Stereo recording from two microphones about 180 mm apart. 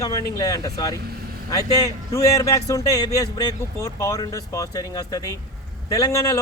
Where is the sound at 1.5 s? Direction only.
15° left (ahead or behind).